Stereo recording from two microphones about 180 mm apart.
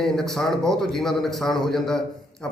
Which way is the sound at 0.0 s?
Centre (ahead or behind).